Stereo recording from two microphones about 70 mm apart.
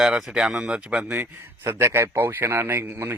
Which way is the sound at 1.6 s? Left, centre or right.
Right.